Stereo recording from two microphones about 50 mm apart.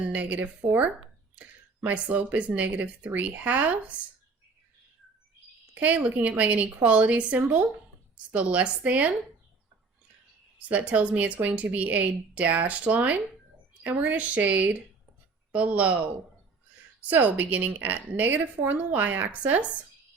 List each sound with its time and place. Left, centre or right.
0.0 s a woman's voice: right
5.7 s a woman's voice: right
10.7 s a woman's voice: right